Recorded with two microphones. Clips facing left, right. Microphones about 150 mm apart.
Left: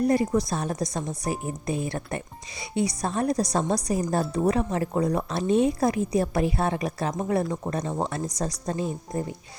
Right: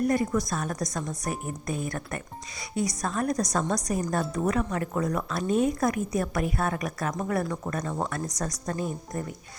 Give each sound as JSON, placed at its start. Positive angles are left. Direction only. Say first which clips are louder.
{"t": 0.0, "sound": "a woman's voice", "louder": "left 3 dB", "side_deg": 30}